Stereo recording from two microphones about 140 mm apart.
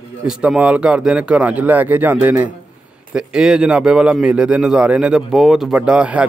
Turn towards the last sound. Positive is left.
turn(degrees=-10)  # may be behind; listen again after turning